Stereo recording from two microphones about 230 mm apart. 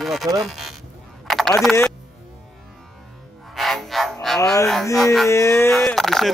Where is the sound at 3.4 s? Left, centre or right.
Centre.